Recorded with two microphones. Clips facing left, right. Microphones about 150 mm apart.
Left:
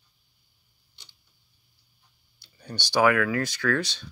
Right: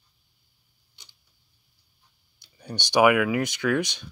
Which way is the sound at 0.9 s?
10° right (ahead or behind).